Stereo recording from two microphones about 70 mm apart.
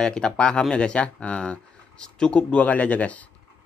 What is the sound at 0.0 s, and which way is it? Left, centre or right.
Speech, centre.